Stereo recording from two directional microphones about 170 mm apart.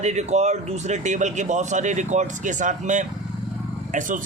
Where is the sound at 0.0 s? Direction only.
40° right (ahead or behind).